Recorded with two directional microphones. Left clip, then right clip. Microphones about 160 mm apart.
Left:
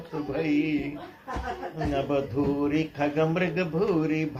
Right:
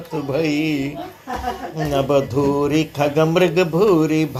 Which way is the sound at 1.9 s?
35° right (ahead or behind).